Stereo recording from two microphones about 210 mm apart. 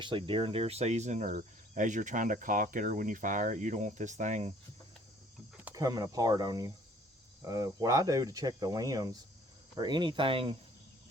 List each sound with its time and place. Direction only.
0.0 s speech: 25° right (ahead or behind)
5.7 s speech: 15° right (ahead or behind)